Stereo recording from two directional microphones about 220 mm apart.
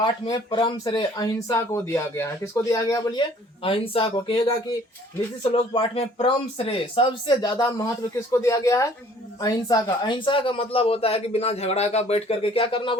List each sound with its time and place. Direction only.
0.0 s speech: 20° left (ahead or behind)